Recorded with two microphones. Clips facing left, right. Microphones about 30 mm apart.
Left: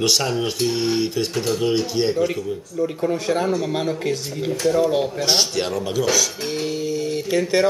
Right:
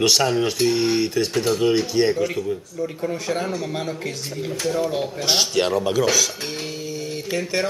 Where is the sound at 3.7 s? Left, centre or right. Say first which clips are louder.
Left 5 dB; centre.